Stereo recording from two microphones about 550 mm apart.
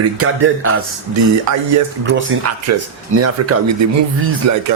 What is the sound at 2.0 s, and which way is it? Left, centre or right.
Mantra, right.